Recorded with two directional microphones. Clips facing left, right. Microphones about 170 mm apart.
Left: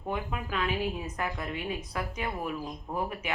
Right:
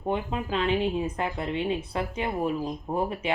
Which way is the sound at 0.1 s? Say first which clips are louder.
Right 5 dB; 25° right (ahead or behind).